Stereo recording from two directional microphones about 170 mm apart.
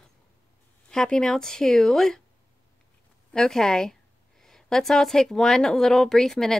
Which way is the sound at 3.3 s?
5° left (ahead or behind).